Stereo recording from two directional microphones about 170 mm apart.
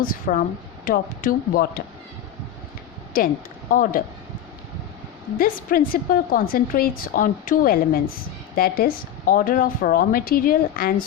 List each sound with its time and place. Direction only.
0.0 s a woman's voice: 55° left (ahead or behind)
3.1 s a woman's voice: 55° left (ahead or behind)
5.4 s a woman's voice: 60° left (ahead or behind)